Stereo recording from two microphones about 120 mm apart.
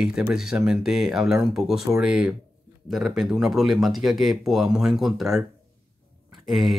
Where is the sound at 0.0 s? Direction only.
5° right (ahead or behind).